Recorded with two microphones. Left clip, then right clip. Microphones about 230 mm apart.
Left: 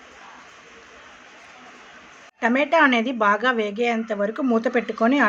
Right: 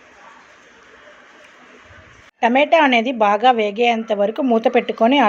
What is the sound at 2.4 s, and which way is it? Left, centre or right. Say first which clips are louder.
A woman's voice: right 4 dB; centre.